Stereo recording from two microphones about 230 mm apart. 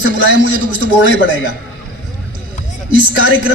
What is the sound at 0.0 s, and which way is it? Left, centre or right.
Speech, left.